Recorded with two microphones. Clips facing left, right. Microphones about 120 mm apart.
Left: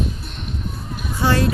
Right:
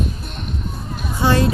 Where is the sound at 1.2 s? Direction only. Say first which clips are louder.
Right 2 dB; 20° right (ahead or behind).